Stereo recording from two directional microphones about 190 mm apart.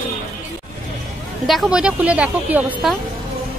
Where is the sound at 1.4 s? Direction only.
Centre (ahead or behind).